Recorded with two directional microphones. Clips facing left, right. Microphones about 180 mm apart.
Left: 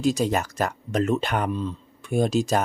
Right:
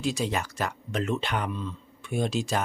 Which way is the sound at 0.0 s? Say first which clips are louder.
Left 6 dB; 40° left (ahead or behind).